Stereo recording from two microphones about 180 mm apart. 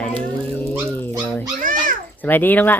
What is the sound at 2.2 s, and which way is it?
Speech, 10° left (ahead or behind).